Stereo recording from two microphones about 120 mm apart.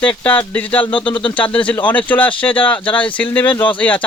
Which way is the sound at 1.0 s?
45° left (ahead or behind).